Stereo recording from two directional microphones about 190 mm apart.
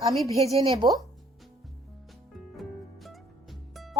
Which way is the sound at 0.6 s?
25° right (ahead or behind).